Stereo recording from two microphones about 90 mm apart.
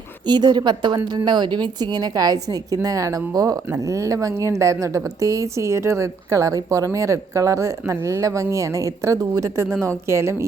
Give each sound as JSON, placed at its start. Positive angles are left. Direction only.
{"t": 0.3, "sound": "a woman's voice", "side_deg": -55}